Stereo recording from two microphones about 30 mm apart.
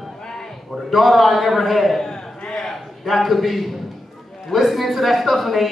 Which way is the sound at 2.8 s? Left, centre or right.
Centre.